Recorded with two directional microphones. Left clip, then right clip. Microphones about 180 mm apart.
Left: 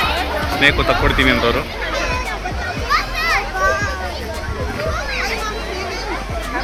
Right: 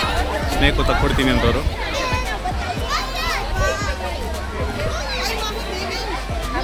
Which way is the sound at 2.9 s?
25° right (ahead or behind).